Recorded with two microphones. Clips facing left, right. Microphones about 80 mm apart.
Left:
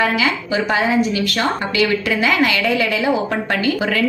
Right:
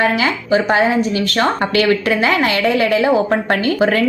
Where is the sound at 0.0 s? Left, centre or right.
Right.